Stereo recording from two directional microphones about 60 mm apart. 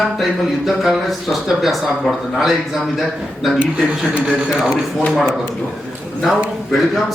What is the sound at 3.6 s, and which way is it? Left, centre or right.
Speech, centre.